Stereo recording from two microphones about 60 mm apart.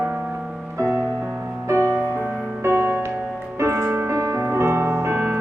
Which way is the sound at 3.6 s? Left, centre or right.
Right.